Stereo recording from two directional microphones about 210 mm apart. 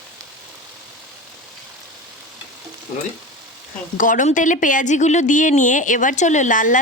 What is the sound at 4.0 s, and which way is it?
A woman's voice, 40° left (ahead or behind).